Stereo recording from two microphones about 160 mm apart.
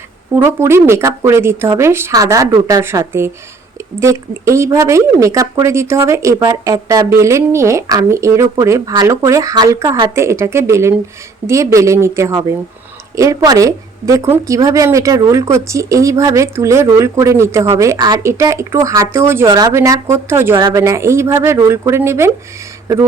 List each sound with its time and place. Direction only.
0.3 s speech: 15° right (ahead or behind)